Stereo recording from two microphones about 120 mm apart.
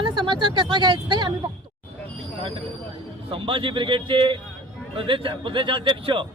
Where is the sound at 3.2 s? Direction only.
45° right (ahead or behind).